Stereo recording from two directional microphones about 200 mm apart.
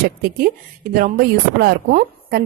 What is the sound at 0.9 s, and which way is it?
A woman's voice, 45° right (ahead or behind).